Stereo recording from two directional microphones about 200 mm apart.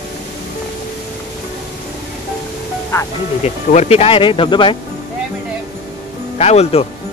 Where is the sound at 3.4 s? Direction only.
35° left (ahead or behind).